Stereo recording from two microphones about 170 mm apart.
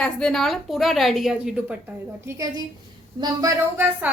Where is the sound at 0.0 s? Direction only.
5° left (ahead or behind).